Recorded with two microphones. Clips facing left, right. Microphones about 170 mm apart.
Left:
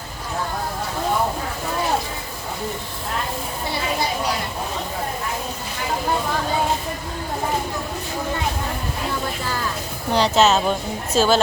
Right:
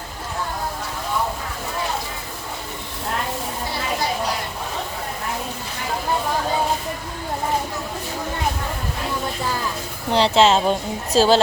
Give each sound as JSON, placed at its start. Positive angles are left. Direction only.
{"t": 10.1, "sound": "speech", "side_deg": -30}